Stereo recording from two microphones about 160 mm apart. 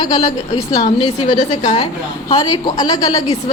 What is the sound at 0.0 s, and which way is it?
Speech, 25° left (ahead or behind).